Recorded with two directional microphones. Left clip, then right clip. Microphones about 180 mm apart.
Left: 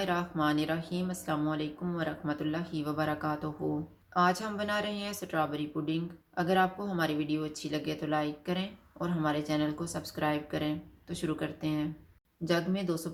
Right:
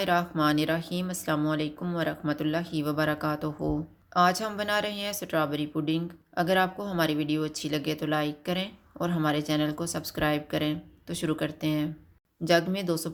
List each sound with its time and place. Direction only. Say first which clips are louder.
0.0 s speech: right 5 dB; 45° right (ahead or behind)